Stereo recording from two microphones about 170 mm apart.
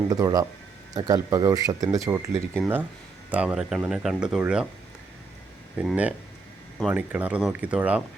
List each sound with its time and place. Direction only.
0.1 s speech: 20° right (ahead or behind); by 4.7 s 5° right (ahead or behind)
5.7 s speech: 5° right (ahead or behind)